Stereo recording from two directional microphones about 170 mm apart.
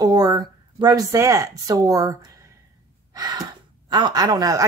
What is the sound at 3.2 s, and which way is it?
Gasp, 25° right (ahead or behind).